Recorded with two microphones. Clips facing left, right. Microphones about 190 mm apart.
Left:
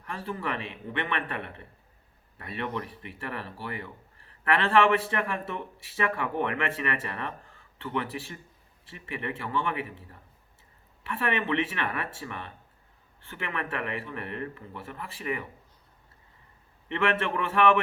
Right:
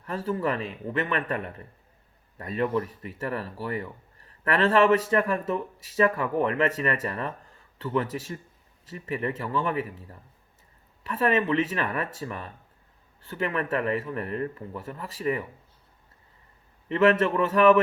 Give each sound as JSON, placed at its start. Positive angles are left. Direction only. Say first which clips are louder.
{"t": 0.0, "sound": "a man's voice", "louder": "right 6 dB", "side_deg": -40}
{"t": 16.9, "sound": "a man's voice", "louder": "right 7 dB", "side_deg": -40}